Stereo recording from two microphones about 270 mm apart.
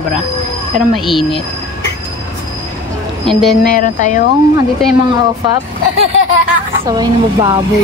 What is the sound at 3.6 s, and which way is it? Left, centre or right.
Speech, left.